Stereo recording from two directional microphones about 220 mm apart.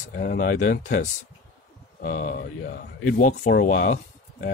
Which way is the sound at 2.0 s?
35° left (ahead or behind).